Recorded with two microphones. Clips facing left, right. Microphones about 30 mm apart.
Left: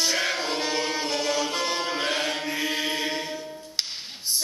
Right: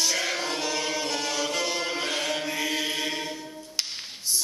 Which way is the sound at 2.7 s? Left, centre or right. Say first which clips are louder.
Left 1 dB; left.